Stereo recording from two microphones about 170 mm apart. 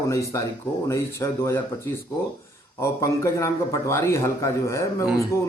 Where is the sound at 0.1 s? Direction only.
20° left (ahead or behind).